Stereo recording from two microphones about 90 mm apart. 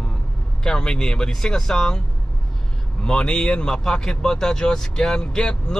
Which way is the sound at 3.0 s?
10° left (ahead or behind).